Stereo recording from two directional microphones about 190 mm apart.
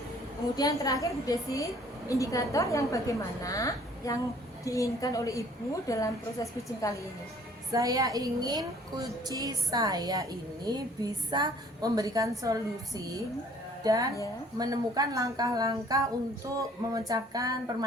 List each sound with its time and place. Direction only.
0.5 s a woman's voice: 20° left (ahead or behind)
7.7 s a woman's voice: 20° right (ahead or behind)